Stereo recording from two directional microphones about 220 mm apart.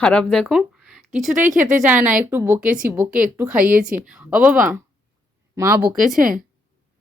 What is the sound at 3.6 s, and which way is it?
Speech, 35° right (ahead or behind).